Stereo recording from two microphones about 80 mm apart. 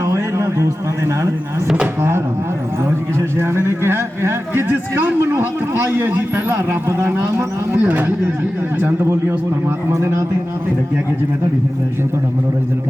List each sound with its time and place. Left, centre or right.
0.0 s a sound: right
2.0 s a man's voice: right
7.8 s a man's voice: right